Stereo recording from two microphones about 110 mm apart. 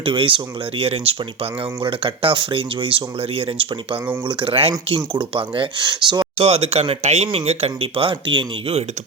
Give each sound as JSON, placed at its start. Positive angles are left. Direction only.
{"t": 0.0, "sound": "speech", "side_deg": -50}
{"t": 6.4, "sound": "speech", "side_deg": -65}
{"t": 7.3, "sound": "speech", "side_deg": -70}